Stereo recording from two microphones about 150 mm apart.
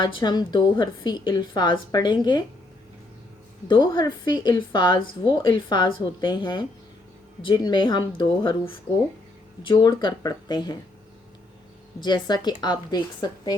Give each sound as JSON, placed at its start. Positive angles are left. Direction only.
{"t": 0.0, "sound": "a woman's voice", "side_deg": 30}
{"t": 3.7, "sound": "a woman's voice", "side_deg": 30}
{"t": 11.9, "sound": "speech", "side_deg": 30}